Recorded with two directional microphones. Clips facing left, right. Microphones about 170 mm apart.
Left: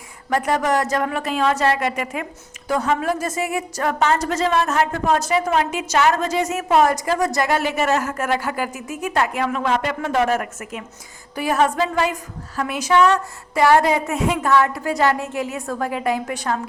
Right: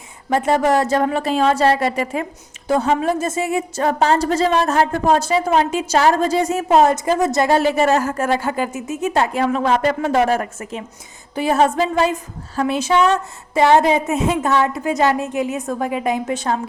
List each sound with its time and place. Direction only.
0.3 s a woman's voice: 25° right (ahead or behind)